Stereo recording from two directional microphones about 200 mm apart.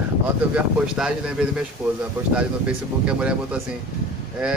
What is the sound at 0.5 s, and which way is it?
Speech, 5° right (ahead or behind).